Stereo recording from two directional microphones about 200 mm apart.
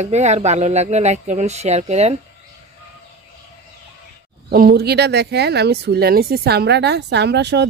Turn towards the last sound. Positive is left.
turn(degrees=-60)  # may be behind; listen again after turning